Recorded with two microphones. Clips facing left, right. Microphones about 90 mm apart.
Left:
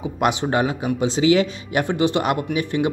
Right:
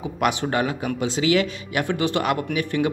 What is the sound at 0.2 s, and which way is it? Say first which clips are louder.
A man's voice: left 2 dB; 25° left (ahead or behind).